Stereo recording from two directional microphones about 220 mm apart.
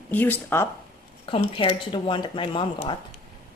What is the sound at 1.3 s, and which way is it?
Speech, 20° left (ahead or behind).